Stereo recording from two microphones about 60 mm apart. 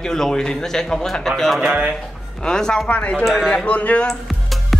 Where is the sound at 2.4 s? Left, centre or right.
Centre.